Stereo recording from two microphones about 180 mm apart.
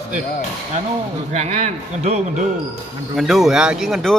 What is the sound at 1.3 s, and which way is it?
Speech, 40° right (ahead or behind).